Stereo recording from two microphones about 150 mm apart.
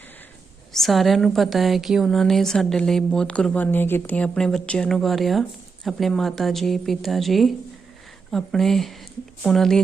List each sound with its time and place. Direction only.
0.7 s a woman's voice: centre (ahead or behind)